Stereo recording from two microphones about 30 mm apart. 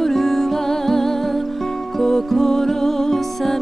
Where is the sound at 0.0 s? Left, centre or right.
Centre.